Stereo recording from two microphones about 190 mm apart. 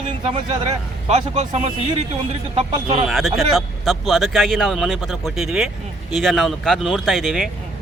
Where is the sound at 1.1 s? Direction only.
35° right (ahead or behind).